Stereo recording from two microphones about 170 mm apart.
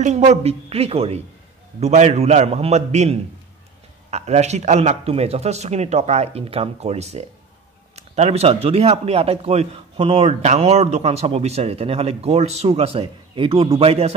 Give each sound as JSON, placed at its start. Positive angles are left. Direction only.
{"t": 0.0, "sound": "speech", "side_deg": -40}